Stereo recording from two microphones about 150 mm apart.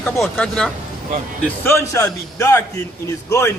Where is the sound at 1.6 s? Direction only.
20° left (ahead or behind).